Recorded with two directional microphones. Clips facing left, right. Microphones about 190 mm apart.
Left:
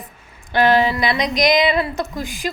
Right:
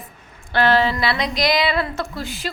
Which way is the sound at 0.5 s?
15° left (ahead or behind).